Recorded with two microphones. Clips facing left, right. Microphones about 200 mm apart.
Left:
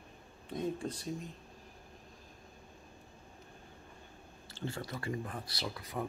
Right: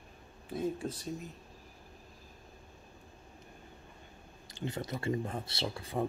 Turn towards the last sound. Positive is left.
turn(degrees=-30)  # may be behind; listen again after turning